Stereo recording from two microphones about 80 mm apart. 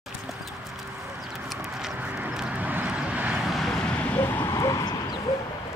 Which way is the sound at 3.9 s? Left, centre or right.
Centre.